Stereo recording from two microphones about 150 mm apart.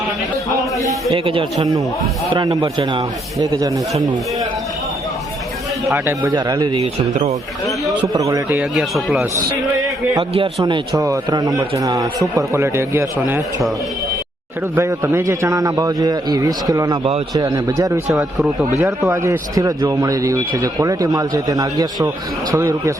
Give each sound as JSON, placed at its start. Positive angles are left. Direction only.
{"t": 1.1, "sound": "a man's voice", "side_deg": -35}
{"t": 5.9, "sound": "speech", "side_deg": -20}
{"t": 7.1, "sound": "speech", "side_deg": -45}
{"t": 8.0, "sound": "speech", "side_deg": -25}
{"t": 8.7, "sound": "speech", "side_deg": 0}
{"t": 10.2, "sound": "a man's voice", "side_deg": -35}
{"t": 10.9, "sound": "a man's voice", "side_deg": -20}
{"t": 14.8, "sound": "speech", "side_deg": -20}
{"t": 18.1, "sound": "speech", "side_deg": 0}
{"t": 18.8, "sound": "speech", "side_deg": -20}